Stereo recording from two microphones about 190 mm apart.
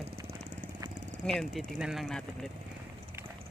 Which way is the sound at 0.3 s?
40° right (ahead or behind).